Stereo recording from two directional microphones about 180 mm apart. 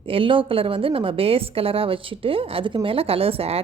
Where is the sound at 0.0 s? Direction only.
30° right (ahead or behind).